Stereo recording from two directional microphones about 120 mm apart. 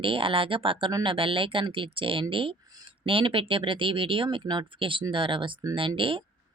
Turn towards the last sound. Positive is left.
turn(degrees=-45)  # may be behind; listen again after turning